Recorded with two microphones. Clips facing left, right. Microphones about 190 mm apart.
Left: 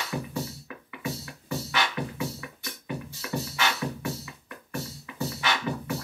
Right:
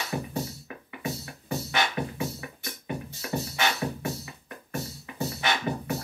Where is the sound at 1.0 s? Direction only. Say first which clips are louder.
Even; 50° right (ahead or behind).